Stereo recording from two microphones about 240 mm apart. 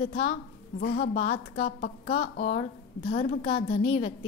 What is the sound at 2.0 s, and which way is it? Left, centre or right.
A woman's voice, left.